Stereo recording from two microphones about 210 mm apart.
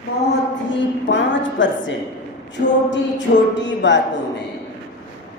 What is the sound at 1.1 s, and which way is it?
Speech, 60° left (ahead or behind).